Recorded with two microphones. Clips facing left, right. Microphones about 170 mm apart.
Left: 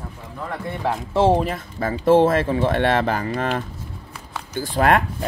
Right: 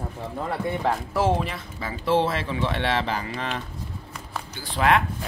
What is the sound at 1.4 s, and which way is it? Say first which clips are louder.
Speech: left 7 dB; 50° left (ahead or behind).